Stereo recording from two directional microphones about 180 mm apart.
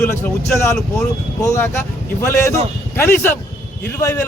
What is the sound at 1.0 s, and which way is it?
Speech, 20° left (ahead or behind).